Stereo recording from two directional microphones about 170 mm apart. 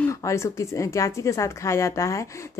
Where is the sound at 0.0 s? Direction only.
20° left (ahead or behind).